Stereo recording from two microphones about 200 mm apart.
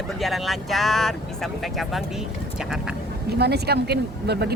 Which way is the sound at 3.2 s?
55° right (ahead or behind).